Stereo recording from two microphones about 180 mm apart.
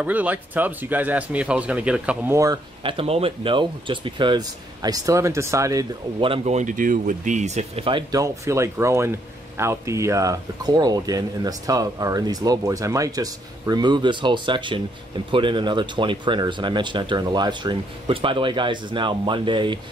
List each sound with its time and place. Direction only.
0.0 s speech: 10° right (ahead or behind); by 19.8 s 25° right (ahead or behind)